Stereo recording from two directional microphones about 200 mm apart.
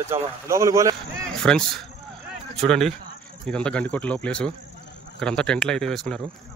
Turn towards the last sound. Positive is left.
turn(degrees=0)  # may be behind; listen again after turning